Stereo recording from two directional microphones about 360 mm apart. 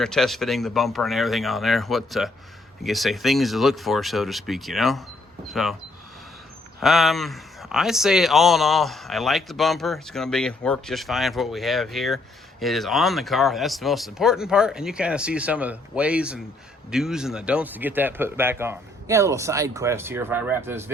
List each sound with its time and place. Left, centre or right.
0.0 s speech: centre
6.7 s speech: centre